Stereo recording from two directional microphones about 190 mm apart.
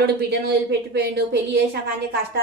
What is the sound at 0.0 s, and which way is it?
A woman's voice, 60° right (ahead or behind).